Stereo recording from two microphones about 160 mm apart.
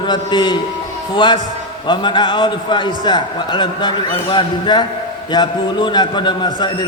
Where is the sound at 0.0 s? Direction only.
30° left (ahead or behind).